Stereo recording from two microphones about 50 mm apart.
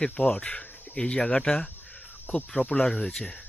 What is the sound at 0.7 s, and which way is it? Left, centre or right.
Cricket, left.